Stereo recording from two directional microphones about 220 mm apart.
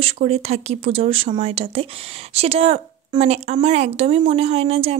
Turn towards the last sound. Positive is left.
turn(degrees=-30)  # may be behind; listen again after turning